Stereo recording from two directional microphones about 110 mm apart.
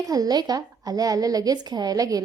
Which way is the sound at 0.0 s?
35° right (ahead or behind).